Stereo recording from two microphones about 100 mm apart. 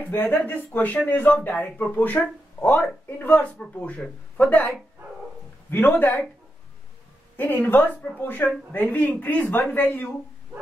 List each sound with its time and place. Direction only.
0.0 s speech: 20° left (ahead or behind)
7.3 s speech: 20° left (ahead or behind)